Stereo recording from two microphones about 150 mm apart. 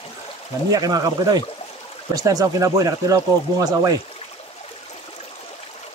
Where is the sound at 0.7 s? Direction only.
25° right (ahead or behind).